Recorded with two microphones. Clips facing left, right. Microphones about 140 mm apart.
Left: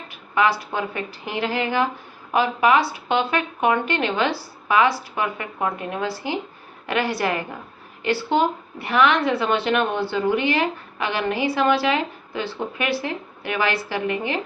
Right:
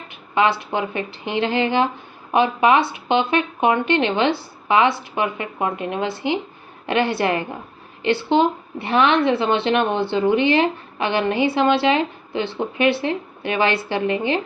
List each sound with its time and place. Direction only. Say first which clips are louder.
0.1 s a woman's voice: right 2 dB; 25° right (ahead or behind)